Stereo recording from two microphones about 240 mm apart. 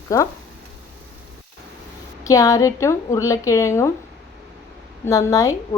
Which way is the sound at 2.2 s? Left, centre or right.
Centre.